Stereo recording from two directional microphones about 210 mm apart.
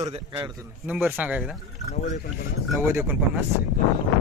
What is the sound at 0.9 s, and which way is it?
Speech, 10° right (ahead or behind).